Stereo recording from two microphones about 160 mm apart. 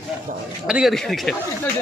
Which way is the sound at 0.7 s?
5° right (ahead or behind).